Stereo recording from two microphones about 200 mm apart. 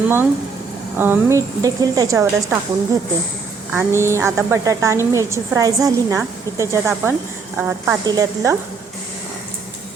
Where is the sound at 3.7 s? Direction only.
15° right (ahead or behind).